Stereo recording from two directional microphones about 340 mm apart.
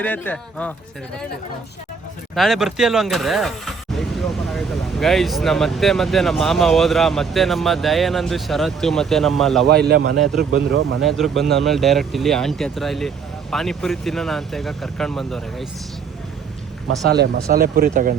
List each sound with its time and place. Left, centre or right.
0.0 s speech: centre
2.3 s speech: centre
9.6 s speech: right
11.0 s speech: centre
17.1 s speech: right